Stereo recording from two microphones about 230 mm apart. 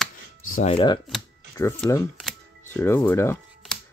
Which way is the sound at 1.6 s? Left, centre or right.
Centre.